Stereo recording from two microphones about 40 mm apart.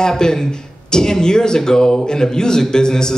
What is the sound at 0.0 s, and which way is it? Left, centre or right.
Speech, centre.